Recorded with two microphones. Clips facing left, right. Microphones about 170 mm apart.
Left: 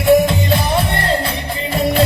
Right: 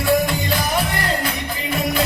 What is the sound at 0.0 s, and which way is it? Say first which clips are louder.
Music: left 6 dB; 25° left (ahead or behind).